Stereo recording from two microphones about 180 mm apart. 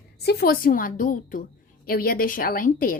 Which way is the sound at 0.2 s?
60° left (ahead or behind).